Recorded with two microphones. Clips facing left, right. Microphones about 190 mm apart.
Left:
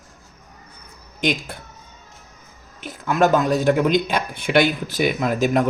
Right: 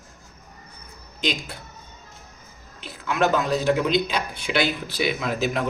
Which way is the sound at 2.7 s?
45° left (ahead or behind).